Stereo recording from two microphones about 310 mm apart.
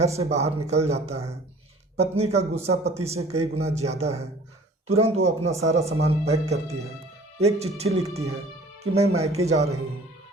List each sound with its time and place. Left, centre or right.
0.0 s speech: right